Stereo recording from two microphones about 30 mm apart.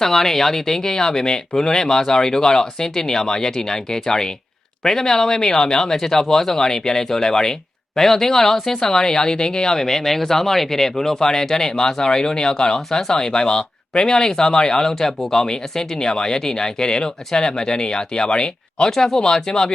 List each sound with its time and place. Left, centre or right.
0.0 s speech: centre
18.9 s speech: centre